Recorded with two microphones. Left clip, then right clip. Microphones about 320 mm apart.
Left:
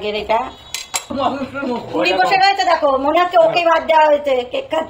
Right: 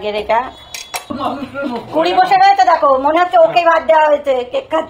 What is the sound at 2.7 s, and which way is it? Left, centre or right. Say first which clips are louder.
A woman's voice: right 3 dB; centre.